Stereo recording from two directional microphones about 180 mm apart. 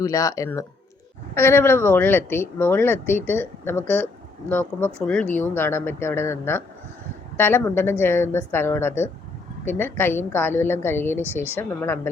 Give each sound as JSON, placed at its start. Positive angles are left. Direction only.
{"t": 0.0, "sound": "speech", "side_deg": 20}